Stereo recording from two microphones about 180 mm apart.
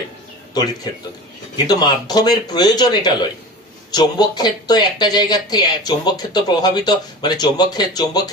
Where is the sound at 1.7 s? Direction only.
20° left (ahead or behind).